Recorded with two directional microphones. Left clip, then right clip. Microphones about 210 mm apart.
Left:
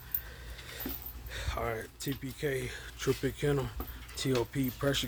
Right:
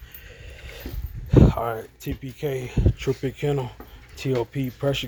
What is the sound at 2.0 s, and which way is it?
Speech, 5° right (ahead or behind).